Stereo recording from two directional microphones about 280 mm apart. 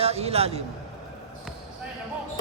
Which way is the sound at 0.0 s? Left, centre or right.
Right.